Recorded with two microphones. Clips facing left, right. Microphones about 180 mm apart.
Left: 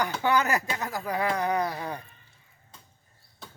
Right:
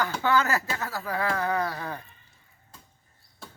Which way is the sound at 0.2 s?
15° left (ahead or behind).